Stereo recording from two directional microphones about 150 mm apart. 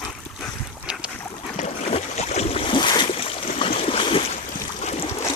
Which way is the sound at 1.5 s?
45° left (ahead or behind).